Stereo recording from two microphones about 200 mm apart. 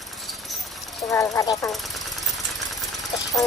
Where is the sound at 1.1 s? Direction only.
15° left (ahead or behind).